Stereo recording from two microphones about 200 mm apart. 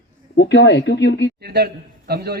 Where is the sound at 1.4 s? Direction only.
50° right (ahead or behind).